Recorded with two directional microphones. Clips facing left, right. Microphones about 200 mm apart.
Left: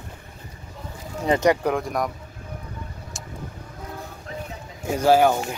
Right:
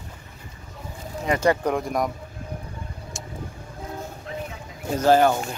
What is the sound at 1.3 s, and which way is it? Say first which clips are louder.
Speech: left 2 dB; 20° left (ahead or behind).